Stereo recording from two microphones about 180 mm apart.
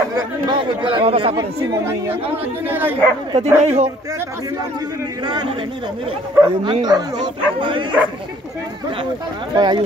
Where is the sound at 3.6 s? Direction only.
40° right (ahead or behind).